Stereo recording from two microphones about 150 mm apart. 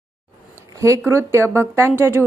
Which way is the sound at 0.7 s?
20° right (ahead or behind).